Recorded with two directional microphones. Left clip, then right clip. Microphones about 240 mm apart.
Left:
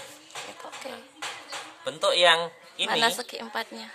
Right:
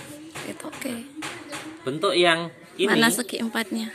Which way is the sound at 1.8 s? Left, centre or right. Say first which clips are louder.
Even; left.